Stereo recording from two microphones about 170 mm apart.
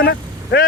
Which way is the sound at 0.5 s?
90° left.